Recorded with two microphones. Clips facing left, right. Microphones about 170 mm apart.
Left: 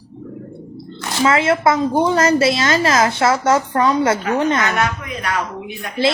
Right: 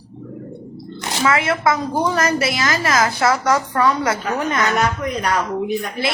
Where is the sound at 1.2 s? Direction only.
25° left (ahead or behind).